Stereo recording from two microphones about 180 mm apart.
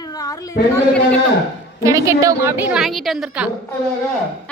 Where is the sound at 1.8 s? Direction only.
15° right (ahead or behind).